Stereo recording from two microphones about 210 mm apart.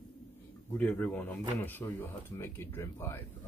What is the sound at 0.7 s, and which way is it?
Speech, 5° left (ahead or behind).